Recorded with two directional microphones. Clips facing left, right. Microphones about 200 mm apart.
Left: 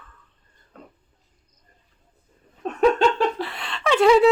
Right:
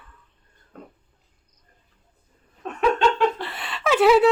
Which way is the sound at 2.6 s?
40° left (ahead or behind).